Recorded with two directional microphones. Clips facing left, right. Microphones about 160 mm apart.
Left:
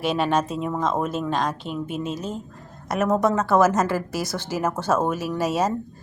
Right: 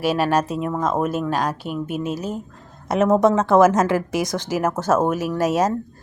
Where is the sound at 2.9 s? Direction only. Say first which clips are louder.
Right 5 dB; 20° right (ahead or behind).